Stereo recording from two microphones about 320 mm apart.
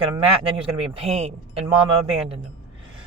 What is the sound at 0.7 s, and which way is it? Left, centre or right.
Speech, centre.